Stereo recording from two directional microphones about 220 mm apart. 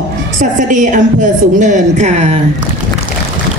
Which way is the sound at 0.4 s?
35° right (ahead or behind).